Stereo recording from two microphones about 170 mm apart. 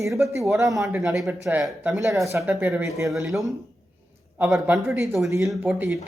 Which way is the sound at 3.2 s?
Centre (ahead or behind).